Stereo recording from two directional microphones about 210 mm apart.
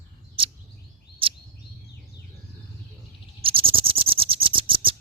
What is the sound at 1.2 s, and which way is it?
Bird vocalization, 25° right (ahead or behind).